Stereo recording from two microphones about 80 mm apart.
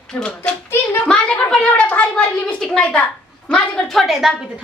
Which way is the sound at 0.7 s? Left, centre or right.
Left.